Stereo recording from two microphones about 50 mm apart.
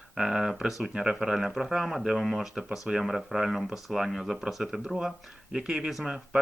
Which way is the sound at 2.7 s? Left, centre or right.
Centre.